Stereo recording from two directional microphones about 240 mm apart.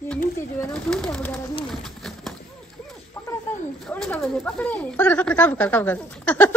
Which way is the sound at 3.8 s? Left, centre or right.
Centre.